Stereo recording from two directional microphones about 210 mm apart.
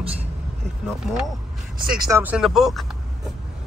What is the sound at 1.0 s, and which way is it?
Speech, centre (ahead or behind).